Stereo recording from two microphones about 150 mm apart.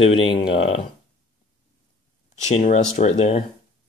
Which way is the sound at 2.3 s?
50° left (ahead or behind).